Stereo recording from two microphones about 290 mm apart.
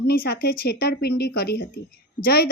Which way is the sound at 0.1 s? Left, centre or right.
Left.